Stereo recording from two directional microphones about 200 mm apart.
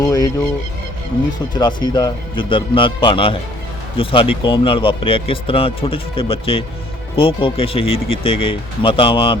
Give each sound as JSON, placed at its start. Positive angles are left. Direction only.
{"t": 0.0, "sound": "speech", "side_deg": 20}
{"t": 1.5, "sound": "speech", "side_deg": 20}